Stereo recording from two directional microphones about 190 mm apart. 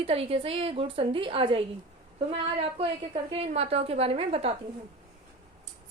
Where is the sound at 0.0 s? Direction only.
30° right (ahead or behind).